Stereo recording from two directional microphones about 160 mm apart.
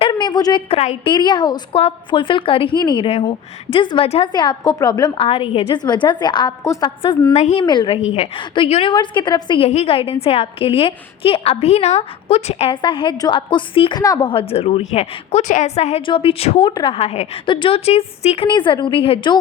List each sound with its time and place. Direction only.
0.1 s a woman's voice: 25° left (ahead or behind)
0.7 s a woman's voice: 45° left (ahead or behind)
1.0 s a woman's voice: 30° left (ahead or behind)
7.3 s a woman's voice: 45° left (ahead or behind)
7.6 s a woman's voice: 30° left (ahead or behind)
9.6 s a woman's voice: 40° left (ahead or behind)
14.0 s a woman's voice: 20° left (ahead or behind)
14.3 s a woman's voice: 35° left (ahead or behind)